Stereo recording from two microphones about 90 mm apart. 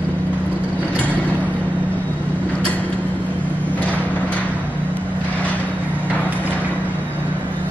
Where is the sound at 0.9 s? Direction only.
15° left (ahead or behind).